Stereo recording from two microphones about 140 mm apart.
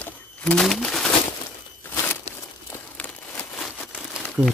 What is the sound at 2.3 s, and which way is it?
Crumpling, 50° left (ahead or behind).